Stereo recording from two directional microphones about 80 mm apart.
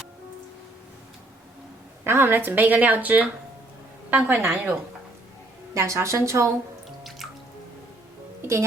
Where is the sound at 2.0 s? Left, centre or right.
Right.